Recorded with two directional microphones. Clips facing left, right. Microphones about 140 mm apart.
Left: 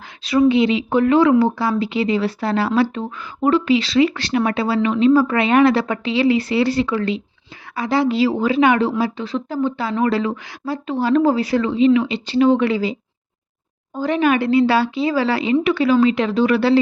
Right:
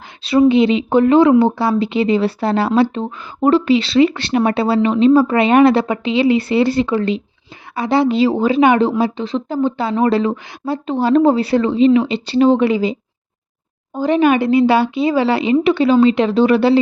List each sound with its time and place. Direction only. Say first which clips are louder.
0.2 s speech: right 3 dB; 25° right (ahead or behind)
12.6 s speech: right 3 dB; 20° right (ahead or behind)